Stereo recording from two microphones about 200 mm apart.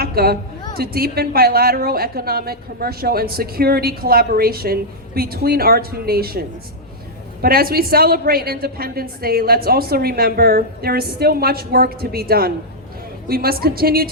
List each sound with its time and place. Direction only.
0.0 s a sound: 50° right (ahead or behind)
0.8 s a woman's voice: 50° right (ahead or behind)
7.4 s a woman's voice: 50° right (ahead or behind)